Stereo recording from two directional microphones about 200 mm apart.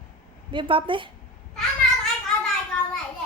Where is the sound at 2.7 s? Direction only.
5° left (ahead or behind).